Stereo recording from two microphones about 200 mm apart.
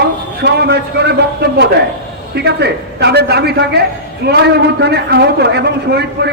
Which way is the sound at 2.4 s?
55° right (ahead or behind).